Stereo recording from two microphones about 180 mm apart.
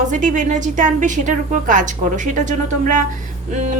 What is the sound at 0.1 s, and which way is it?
A woman's voice, 45° right (ahead or behind).